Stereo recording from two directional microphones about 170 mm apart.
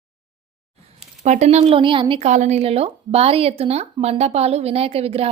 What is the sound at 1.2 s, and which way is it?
A woman's voice, 40° right (ahead or behind).